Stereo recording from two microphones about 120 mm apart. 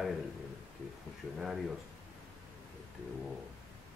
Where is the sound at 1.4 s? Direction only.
5° right (ahead or behind).